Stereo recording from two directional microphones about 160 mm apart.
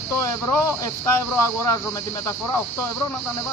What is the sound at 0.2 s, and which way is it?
Speech, 20° left (ahead or behind).